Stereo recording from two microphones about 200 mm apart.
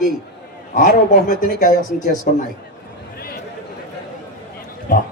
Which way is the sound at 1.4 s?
45° left (ahead or behind).